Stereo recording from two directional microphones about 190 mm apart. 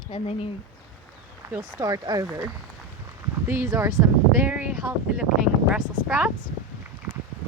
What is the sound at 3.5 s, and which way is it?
Speech, 15° right (ahead or behind).